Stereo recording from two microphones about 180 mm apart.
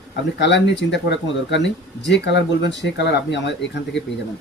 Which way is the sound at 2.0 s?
75° left (ahead or behind).